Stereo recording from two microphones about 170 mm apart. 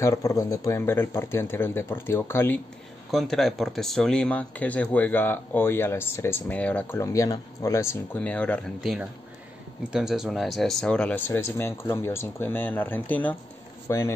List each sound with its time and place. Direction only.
0.0 s speech: 20° left (ahead or behind)
3.1 s speech: centre (ahead or behind); by 14.1 s 15° left (ahead or behind)